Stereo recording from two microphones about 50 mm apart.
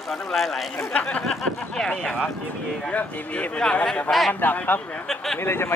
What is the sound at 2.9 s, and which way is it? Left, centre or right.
Speech, left.